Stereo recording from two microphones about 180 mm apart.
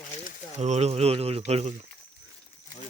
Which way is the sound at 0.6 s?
40° right (ahead or behind).